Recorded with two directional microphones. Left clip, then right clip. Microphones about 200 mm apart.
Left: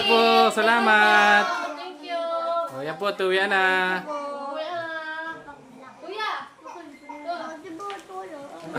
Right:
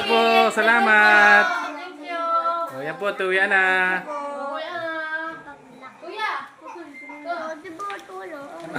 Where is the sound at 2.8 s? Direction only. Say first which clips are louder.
Right 1 dB; 5° left (ahead or behind).